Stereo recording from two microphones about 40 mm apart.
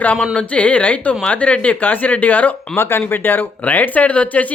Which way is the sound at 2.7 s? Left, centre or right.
Left.